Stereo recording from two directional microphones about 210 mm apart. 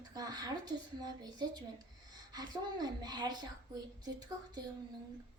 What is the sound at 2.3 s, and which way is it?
A woman's voice, 20° right (ahead or behind).